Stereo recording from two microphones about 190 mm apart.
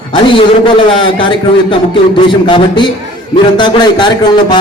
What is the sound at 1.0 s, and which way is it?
A man's voice, 25° left (ahead or behind).